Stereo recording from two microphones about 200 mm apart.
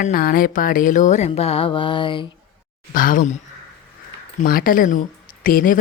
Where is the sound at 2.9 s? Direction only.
45° left (ahead or behind).